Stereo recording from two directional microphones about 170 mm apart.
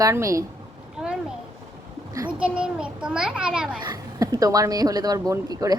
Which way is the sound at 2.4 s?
5° right (ahead or behind).